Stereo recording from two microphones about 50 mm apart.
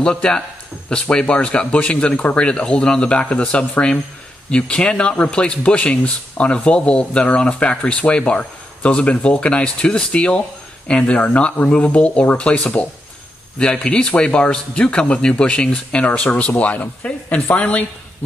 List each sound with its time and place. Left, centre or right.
0.0 s speech: centre
13.8 s speech: centre